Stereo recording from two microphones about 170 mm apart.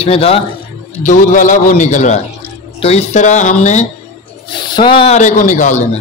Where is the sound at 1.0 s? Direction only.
50° left (ahead or behind).